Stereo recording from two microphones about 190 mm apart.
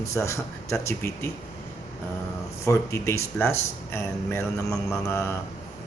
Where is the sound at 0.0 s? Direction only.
15° left (ahead or behind).